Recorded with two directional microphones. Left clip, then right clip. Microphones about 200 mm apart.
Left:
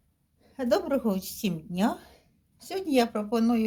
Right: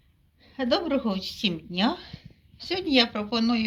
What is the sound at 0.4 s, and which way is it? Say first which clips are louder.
Speech: right 1 dB; 55° left (ahead or behind).